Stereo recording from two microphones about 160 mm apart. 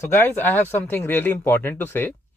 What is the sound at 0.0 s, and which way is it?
Speech, 10° left (ahead or behind).